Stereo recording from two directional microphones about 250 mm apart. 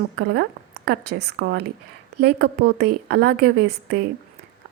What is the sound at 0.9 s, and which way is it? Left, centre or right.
A woman's voice, right.